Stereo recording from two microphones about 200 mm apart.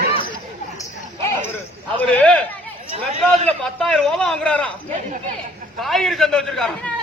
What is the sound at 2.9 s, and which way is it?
Speech, 30° right (ahead or behind).